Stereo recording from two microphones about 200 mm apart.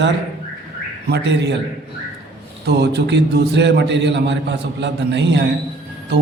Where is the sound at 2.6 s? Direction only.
55° right (ahead or behind).